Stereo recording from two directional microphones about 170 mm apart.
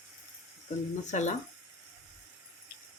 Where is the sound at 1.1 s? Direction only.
45° left (ahead or behind).